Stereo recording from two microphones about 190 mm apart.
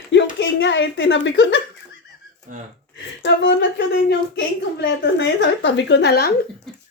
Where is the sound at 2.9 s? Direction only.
70° left (ahead or behind).